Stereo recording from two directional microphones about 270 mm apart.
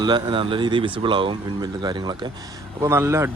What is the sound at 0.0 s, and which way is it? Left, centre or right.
Speech, centre.